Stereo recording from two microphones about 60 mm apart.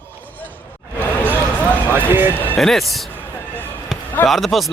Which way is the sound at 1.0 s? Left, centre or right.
Left.